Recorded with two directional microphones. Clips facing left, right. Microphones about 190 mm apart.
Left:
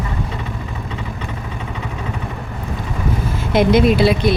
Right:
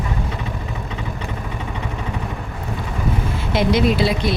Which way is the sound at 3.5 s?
55° left (ahead or behind).